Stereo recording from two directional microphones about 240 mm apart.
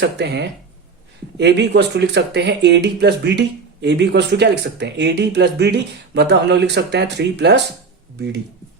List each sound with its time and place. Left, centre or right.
0.0 s speech: right